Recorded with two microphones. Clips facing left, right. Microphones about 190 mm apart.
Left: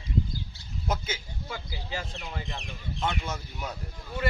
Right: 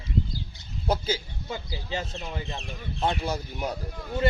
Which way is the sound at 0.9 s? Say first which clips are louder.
Right 6 dB; 35° right (ahead or behind).